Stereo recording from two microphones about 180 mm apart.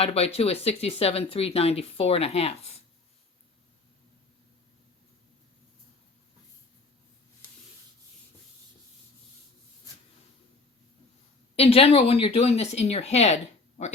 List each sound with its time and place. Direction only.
0.0 s speech: 35° left (ahead or behind)
11.5 s speech: 30° left (ahead or behind)